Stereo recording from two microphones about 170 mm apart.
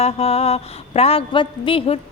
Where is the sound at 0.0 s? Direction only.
35° left (ahead or behind).